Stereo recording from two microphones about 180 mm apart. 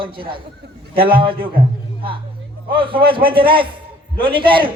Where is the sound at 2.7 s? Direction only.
30° right (ahead or behind).